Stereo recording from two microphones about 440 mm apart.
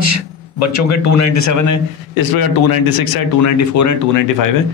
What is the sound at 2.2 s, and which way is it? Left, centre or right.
Speech, left.